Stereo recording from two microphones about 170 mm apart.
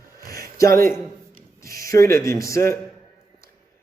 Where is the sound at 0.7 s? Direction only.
60° right (ahead or behind).